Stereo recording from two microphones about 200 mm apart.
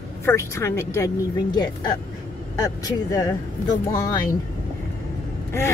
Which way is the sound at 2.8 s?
20° left (ahead or behind).